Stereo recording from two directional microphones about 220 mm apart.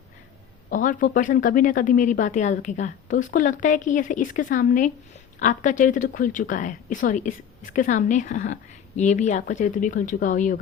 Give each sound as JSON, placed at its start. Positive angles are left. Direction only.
{"t": 0.7, "sound": "speech", "side_deg": 35}